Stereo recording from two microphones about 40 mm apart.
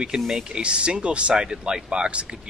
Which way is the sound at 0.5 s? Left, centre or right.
Right.